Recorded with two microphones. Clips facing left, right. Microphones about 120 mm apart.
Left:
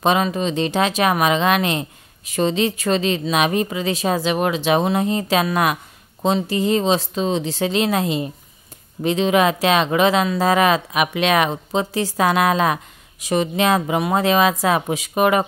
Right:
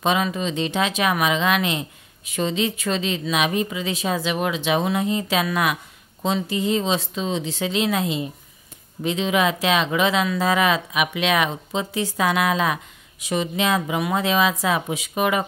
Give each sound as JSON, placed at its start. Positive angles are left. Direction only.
{"t": 0.0, "sound": "speech", "side_deg": 45}